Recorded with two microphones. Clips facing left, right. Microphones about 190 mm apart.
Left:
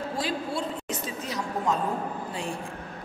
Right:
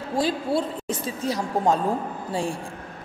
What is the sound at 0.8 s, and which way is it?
Speech, 30° right (ahead or behind).